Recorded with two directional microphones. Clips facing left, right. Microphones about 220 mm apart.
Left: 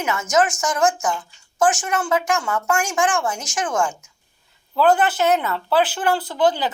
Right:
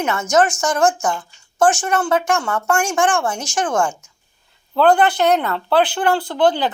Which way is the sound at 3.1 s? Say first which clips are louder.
Right 2 dB; 30° right (ahead or behind).